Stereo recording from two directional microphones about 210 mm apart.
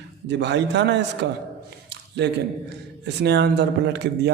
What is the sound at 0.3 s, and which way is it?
A man's voice, 55° right (ahead or behind).